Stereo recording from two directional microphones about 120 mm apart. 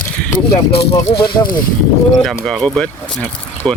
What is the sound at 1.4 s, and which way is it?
Speech, 15° left (ahead or behind).